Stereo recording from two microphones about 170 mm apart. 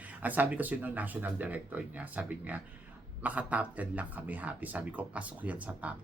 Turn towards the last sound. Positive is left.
turn(degrees=-10)  # may be behind; listen again after turning